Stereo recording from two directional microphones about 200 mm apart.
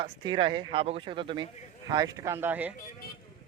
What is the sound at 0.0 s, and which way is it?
Speech, 25° right (ahead or behind).